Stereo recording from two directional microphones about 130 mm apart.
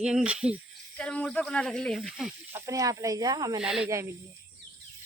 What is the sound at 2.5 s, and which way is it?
Speech, 20° right (ahead or behind).